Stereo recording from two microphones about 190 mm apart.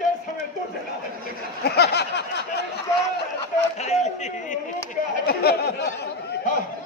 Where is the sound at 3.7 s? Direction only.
35° left (ahead or behind).